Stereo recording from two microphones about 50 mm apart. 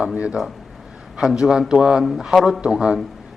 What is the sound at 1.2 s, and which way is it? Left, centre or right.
A man's voice, centre.